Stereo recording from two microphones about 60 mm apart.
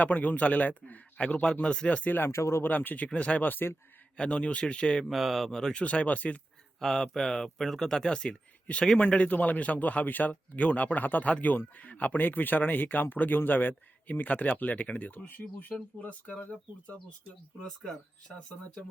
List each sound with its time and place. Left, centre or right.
0.0 s a man's voice: left
2.0 s speech: left
2.3 s speech: left
2.6 s a man's voice: left
4.2 s speech: centre
5.0 s speech: centre
5.5 s speech: centre
5.8 s a man's voice: left
6.7 s a man's voice: centre
17.6 s a man's voice: centre